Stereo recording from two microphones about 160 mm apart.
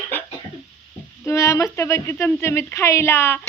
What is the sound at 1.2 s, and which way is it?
Speech, 15° left (ahead or behind).